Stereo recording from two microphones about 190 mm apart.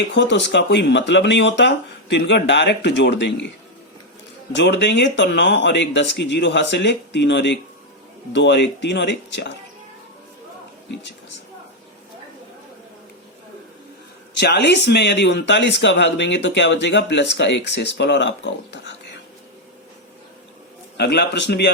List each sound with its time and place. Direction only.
0.1 s speech: 65° left (ahead or behind)
4.5 s speech: 65° left (ahead or behind)
14.3 s speech: 65° left (ahead or behind)
21.0 s a man's voice: 60° left (ahead or behind)